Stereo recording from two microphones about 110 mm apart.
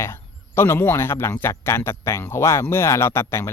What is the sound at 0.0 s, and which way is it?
Speech, 25° left (ahead or behind).